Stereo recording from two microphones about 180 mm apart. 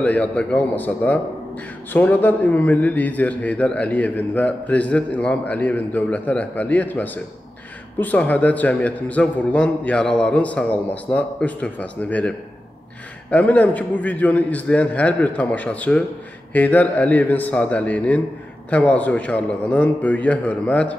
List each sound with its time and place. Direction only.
0.0 s a man's voice: 5° left (ahead or behind)